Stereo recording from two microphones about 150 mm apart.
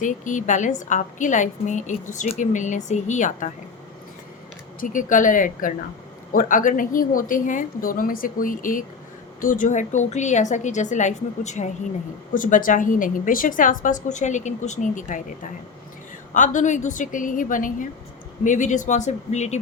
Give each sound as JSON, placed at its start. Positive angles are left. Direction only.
{"t": 0.0, "sound": "a woman's voice", "side_deg": 55}
{"t": 4.8, "sound": "a woman's voice", "side_deg": 60}
{"t": 12.3, "sound": "a woman's voice", "side_deg": 60}